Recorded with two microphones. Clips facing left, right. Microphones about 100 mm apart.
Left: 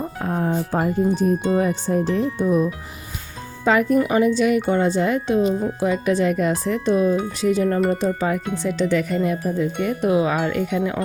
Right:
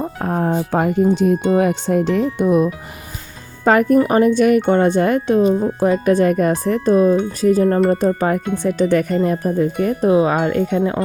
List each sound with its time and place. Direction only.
0.2 s music: 55° right (ahead or behind)
0.7 s speech: 75° right (ahead or behind); by 2.2 s 90° right
2.4 s speech: 75° right (ahead or behind)
3.6 s speech: 50° right (ahead or behind); by 11.0 s 35° right (ahead or behind)